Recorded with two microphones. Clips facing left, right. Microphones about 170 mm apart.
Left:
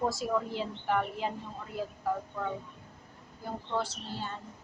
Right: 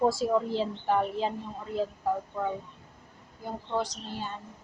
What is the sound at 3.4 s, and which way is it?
Speech, 15° right (ahead or behind).